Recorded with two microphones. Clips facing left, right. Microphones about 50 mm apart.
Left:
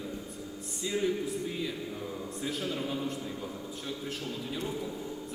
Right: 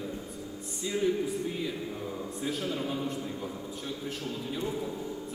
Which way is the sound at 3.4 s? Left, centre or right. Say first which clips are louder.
Right 2 dB; centre.